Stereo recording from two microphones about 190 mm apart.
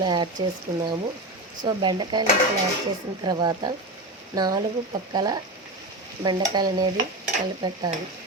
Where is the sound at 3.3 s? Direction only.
25° right (ahead or behind).